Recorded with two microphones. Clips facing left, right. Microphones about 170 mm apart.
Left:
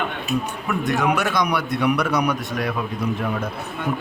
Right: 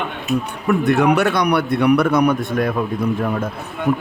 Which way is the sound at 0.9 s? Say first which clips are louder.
Right 5 dB; 60° right (ahead or behind).